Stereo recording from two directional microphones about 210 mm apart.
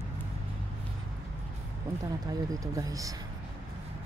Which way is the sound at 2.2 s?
15° right (ahead or behind).